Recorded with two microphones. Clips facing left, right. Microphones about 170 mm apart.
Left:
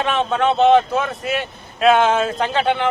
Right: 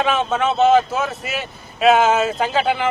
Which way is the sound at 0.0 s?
Centre (ahead or behind).